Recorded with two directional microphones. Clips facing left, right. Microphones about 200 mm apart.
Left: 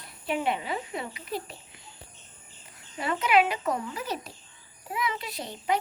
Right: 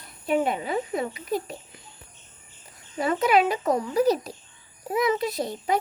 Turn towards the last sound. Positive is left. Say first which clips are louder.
# right 4 dB
turn(degrees=-40)  # may be behind; listen again after turning